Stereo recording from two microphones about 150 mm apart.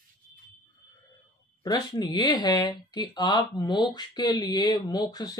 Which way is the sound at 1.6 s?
25° left (ahead or behind).